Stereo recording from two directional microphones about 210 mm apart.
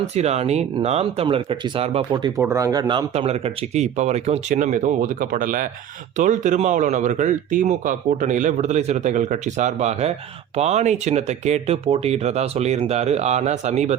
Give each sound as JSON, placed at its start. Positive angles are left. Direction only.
{"t": 0.0, "sound": "a man's voice", "side_deg": -30}